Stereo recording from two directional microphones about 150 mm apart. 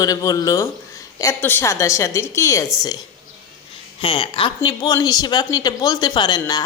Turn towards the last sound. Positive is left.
turn(degrees=25)  # may be behind; listen again after turning